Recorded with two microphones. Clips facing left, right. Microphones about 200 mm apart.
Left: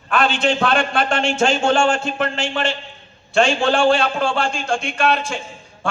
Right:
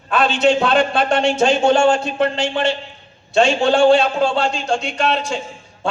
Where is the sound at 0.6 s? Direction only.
25° right (ahead or behind).